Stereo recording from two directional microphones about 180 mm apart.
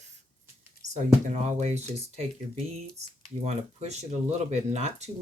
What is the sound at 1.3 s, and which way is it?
Speech, 40° right (ahead or behind).